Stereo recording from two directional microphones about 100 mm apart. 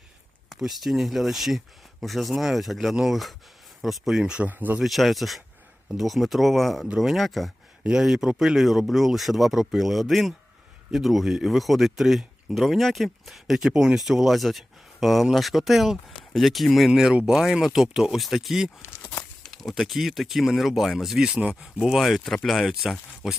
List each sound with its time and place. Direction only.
0.5 s speech: centre (ahead or behind); by 4.8 s 15° right (ahead or behind)
4.8 s speech: centre (ahead or behind)
18.8 s a sound: 20° left (ahead or behind)
19.5 s speech: centre (ahead or behind)